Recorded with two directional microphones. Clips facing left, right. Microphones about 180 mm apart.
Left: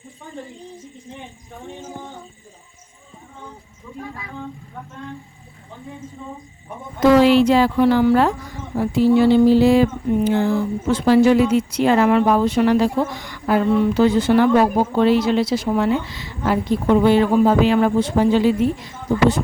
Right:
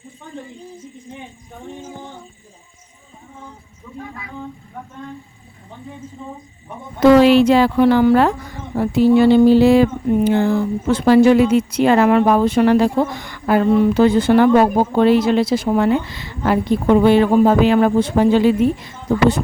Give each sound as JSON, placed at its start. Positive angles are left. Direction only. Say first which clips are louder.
{"t": 7.0, "sound": "speech", "louder": "right 3 dB", "side_deg": -65}